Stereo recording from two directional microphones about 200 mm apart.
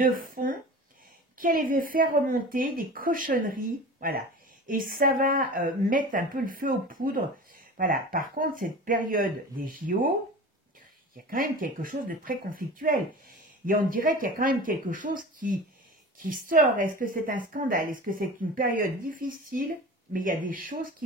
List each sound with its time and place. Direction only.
0.0 s a woman's voice: 45° right (ahead or behind)
11.2 s a woman's voice: 45° right (ahead or behind)